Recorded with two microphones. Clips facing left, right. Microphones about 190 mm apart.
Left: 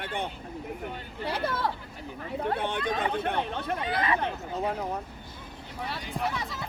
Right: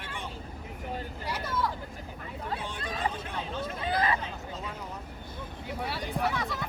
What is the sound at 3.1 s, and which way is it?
Chatter, 60° left (ahead or behind).